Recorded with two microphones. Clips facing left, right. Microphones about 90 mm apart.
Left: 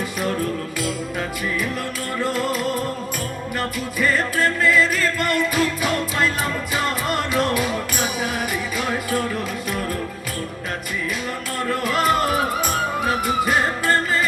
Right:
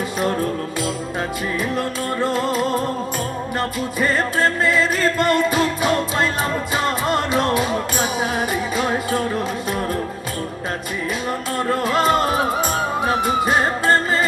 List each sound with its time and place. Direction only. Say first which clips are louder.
2.2 s music: right 2 dB; 25° right (ahead or behind)
11.7 s music: right 2 dB; 25° right (ahead or behind)